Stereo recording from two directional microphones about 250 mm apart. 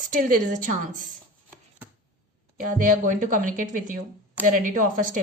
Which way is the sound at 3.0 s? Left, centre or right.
Right.